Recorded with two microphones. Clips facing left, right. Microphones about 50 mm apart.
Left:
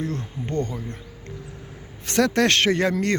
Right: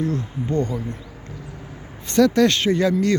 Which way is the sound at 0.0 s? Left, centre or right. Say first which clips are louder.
Right 5 dB; left.